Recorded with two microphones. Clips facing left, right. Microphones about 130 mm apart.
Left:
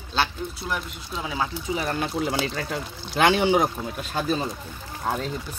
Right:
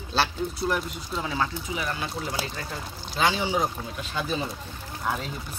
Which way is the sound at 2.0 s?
80° left.